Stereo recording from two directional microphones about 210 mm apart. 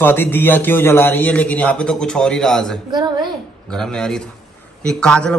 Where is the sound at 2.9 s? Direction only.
20° right (ahead or behind).